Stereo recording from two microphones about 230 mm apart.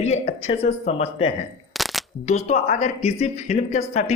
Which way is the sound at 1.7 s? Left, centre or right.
Centre.